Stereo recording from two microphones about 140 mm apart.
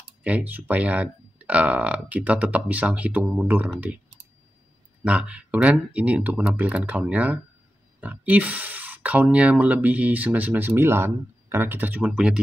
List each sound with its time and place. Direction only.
0.2 s speech: 10° right (ahead or behind)
5.0 s speech: 10° right (ahead or behind)